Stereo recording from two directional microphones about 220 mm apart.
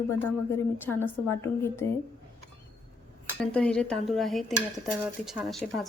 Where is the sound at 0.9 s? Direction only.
5° left (ahead or behind).